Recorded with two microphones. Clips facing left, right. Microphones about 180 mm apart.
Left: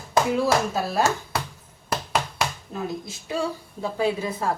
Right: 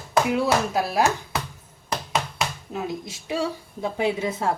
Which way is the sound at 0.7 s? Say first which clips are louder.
Right 1 dB; 15° right (ahead or behind).